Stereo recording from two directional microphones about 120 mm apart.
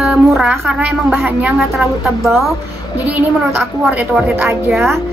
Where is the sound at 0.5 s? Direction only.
20° right (ahead or behind).